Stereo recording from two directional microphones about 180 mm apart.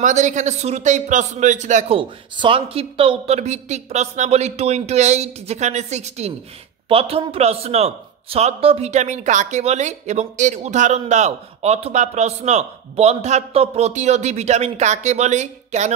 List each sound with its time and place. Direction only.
0.0 s a man's voice: 45° right (ahead or behind)
2.0 s a man's voice: 30° right (ahead or behind)